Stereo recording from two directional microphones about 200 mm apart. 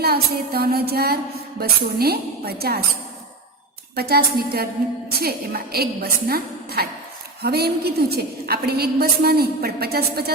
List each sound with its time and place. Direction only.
0.0 s a woman's voice: 50° right (ahead or behind)
3.9 s a woman's voice: 50° right (ahead or behind)
5.7 s a woman's voice: 50° right (ahead or behind)